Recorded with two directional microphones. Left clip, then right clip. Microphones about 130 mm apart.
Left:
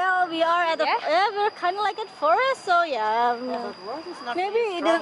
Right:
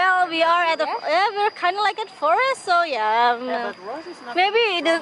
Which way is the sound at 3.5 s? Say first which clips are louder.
Right 4 dB; 15° left (ahead or behind).